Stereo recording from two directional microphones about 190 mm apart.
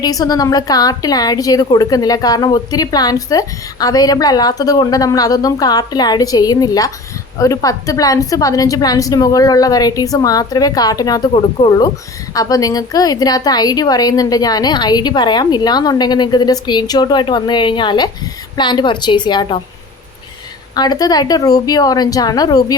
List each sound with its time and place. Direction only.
0.0 s a woman's voice: 20° left (ahead or behind)
20.7 s a woman's voice: 20° left (ahead or behind)